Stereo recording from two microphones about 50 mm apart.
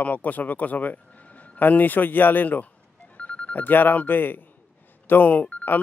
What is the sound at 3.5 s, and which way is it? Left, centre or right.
Speech, left.